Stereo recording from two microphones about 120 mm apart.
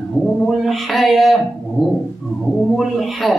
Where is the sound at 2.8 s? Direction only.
Centre (ahead or behind).